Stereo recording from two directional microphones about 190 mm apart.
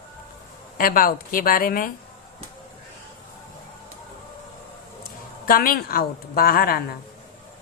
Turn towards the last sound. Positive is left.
turn(degrees=55)  # may be behind; listen again after turning